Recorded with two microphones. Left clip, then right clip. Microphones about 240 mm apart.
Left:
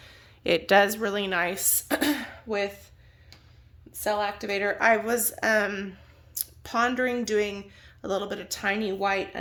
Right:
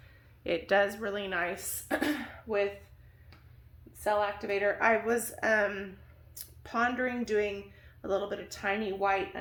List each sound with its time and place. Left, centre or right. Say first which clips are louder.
0.0 s a woman's voice: left 8 dB; left
4.0 s speech: left 2 dB; left